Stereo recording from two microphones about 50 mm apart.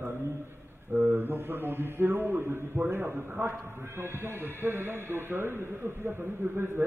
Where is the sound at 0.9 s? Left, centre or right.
Right.